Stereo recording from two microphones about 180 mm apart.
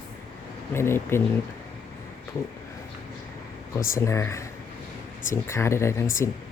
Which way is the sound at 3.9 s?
15° left (ahead or behind).